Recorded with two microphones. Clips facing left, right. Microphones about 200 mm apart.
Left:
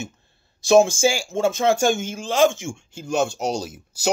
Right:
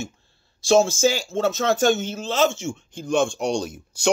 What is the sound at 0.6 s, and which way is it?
Speech, 15° left (ahead or behind).